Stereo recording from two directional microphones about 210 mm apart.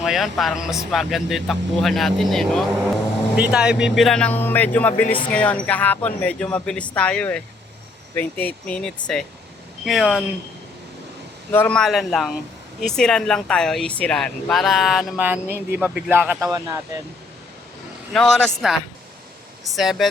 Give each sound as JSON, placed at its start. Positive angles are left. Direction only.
{"t": 0.0, "sound": "speech", "side_deg": 0}
{"t": 5.0, "sound": "speech", "side_deg": 25}
{"t": 5.3, "sound": "speech", "side_deg": 5}
{"t": 11.5, "sound": "speech", "side_deg": 5}
{"t": 18.1, "sound": "speech", "side_deg": 5}